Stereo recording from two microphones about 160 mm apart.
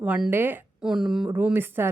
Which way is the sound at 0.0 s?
10° right (ahead or behind).